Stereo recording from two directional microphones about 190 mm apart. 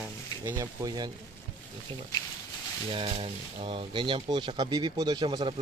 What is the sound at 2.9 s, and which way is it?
Speech, 30° right (ahead or behind).